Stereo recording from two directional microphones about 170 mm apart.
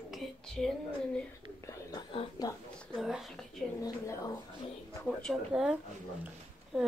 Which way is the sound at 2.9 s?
Centre (ahead or behind).